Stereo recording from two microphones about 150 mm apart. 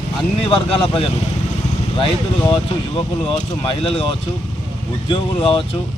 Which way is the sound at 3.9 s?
40° left (ahead or behind).